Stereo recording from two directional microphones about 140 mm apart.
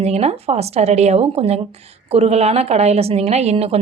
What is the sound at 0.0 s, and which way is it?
A woman's voice, 50° right (ahead or behind).